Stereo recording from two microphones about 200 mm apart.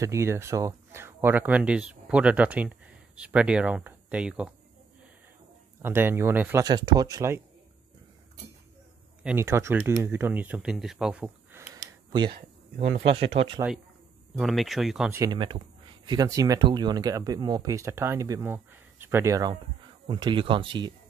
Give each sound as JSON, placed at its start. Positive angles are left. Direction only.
{"t": 0.0, "sound": "speech", "side_deg": -15}
{"t": 5.8, "sound": "speech", "side_deg": -10}
{"t": 9.2, "sound": "speech", "side_deg": -10}
{"t": 12.1, "sound": "speech", "side_deg": -25}
{"t": 14.3, "sound": "speech", "side_deg": 0}
{"t": 15.1, "sound": "speech", "side_deg": -20}